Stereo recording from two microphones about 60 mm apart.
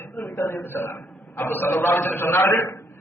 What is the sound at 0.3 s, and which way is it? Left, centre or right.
A man's voice, left.